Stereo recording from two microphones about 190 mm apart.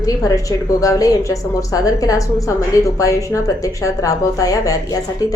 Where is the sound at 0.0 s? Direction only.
20° left (ahead or behind).